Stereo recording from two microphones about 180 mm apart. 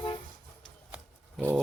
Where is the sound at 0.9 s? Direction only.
5° right (ahead or behind).